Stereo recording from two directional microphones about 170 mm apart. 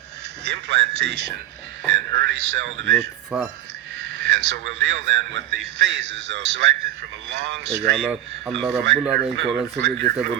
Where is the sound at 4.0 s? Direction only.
90° right.